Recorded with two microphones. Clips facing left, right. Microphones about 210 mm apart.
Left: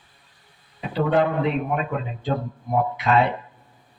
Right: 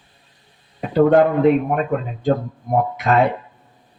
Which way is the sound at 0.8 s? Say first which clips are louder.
Right 7 dB; 45° right (ahead or behind).